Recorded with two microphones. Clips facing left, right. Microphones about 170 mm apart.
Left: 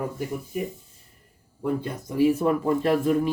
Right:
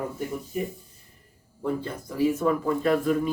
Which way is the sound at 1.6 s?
15° left (ahead or behind).